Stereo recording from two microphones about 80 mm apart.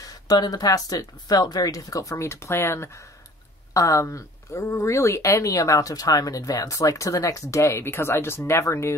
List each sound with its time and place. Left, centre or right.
0.0 s speech: left